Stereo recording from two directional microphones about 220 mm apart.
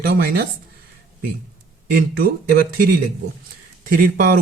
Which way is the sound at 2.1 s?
40° right (ahead or behind).